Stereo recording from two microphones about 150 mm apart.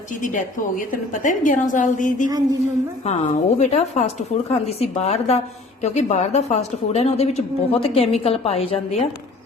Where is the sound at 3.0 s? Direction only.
45° left (ahead or behind).